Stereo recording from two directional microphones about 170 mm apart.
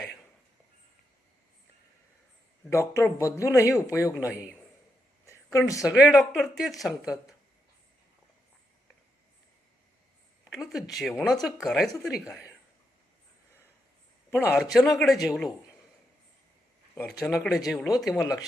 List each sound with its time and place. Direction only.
2.6 s a man's voice: 15° left (ahead or behind)
5.2 s a sound: 15° left (ahead or behind)
5.8 s speech: 5° right (ahead or behind)
10.5 s speech: centre (ahead or behind)
14.3 s a man's voice: 15° left (ahead or behind)
14.5 s speech: centre (ahead or behind)
17.1 s speech: centre (ahead or behind)